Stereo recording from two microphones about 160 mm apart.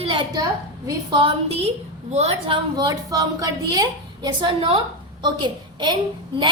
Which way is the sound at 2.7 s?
25° right (ahead or behind).